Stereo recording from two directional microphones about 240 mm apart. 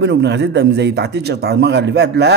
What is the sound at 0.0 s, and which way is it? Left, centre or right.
Speech, right.